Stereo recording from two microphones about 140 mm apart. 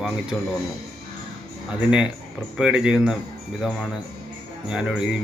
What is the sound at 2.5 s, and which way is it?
Speech, 5° right (ahead or behind).